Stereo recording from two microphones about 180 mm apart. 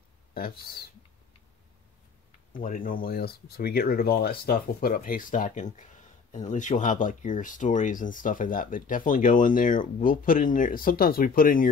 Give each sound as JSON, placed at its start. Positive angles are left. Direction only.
{"t": 0.3, "sound": "speech", "side_deg": 55}
{"t": 2.5, "sound": "speech", "side_deg": 50}